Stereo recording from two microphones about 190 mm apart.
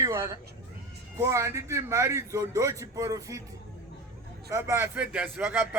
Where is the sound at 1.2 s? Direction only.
15° right (ahead or behind).